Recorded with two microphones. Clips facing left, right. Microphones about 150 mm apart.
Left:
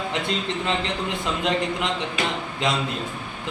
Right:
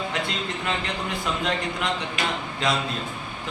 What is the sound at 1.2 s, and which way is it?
A man's voice, 20° left (ahead or behind).